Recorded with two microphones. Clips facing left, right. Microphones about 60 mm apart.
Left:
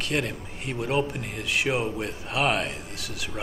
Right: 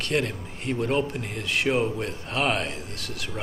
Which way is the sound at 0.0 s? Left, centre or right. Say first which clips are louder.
Right 2 dB; centre.